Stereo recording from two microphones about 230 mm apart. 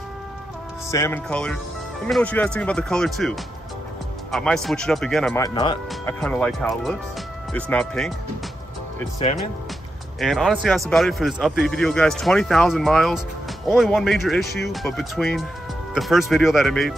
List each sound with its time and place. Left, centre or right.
0.9 s speech: centre
5.4 s speech: centre
6.2 s speech: centre
10.2 s speech: centre